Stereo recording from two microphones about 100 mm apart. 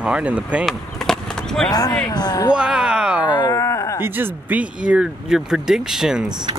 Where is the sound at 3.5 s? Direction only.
30° left (ahead or behind).